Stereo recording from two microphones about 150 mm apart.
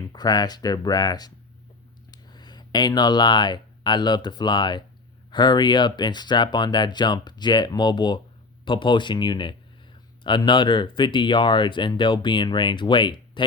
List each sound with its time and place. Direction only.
0.1 s speech: 25° left (ahead or behind)